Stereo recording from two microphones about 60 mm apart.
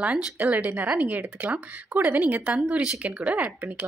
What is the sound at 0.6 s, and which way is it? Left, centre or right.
Speech, right.